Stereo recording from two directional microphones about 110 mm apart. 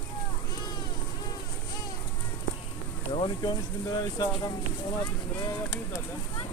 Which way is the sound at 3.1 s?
45° left (ahead or behind).